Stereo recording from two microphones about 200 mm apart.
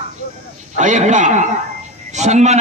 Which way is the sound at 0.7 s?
40° right (ahead or behind).